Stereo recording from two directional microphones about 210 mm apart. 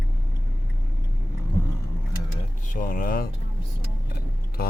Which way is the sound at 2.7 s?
40° left (ahead or behind).